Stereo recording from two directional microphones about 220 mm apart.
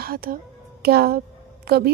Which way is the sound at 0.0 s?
45° right (ahead or behind).